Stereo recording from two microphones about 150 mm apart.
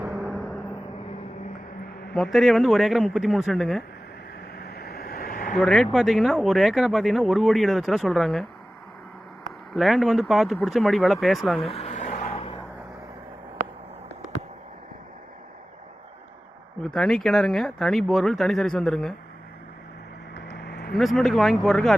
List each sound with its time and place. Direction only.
0.2 s a sound: centre (ahead or behind)
2.1 s speech: centre (ahead or behind)
4.5 s a sound: 90° left; by 5.5 s 65° left (ahead or behind)
5.5 s speech: 5° left (ahead or behind)
9.7 s speech: centre (ahead or behind)
11.6 s a sound: 40° left (ahead or behind)
16.8 s speech: 5° left (ahead or behind)
20.6 s vehicle: 90° left
20.9 s speech: centre (ahead or behind)